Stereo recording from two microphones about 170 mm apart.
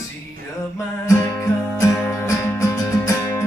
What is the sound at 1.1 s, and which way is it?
Music, 20° left (ahead or behind).